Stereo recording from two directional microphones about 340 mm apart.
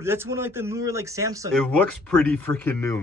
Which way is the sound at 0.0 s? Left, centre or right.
Centre.